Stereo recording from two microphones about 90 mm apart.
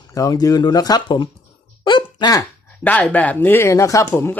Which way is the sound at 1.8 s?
55° left (ahead or behind).